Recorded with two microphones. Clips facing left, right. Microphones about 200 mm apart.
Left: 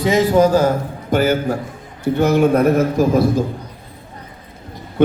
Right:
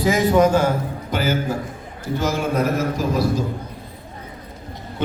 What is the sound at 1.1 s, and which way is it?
A man's voice, 55° left (ahead or behind).